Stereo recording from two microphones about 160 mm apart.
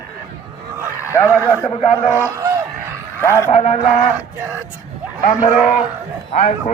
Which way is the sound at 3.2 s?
15° left (ahead or behind).